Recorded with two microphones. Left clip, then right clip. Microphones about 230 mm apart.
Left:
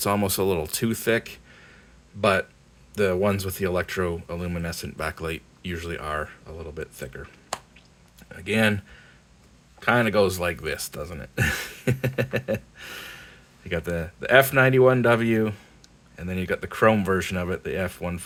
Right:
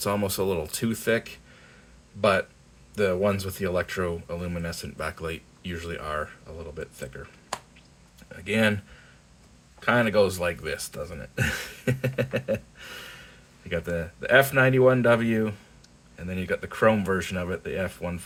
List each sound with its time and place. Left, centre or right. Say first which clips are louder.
0.0 s speech: left 3 dB; left
2.9 s speech: left 1 dB; left
8.4 s speech: left 1 dB; left
9.8 s speech: left 1 dB; left